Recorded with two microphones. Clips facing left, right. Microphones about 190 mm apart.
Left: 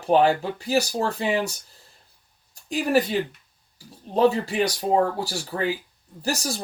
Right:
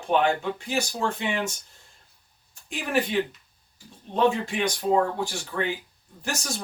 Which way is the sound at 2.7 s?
40° left (ahead or behind).